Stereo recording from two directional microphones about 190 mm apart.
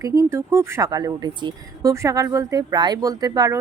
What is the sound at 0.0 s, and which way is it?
Speech, 15° right (ahead or behind).